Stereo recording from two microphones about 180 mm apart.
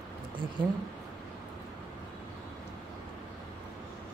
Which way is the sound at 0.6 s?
25° right (ahead or behind).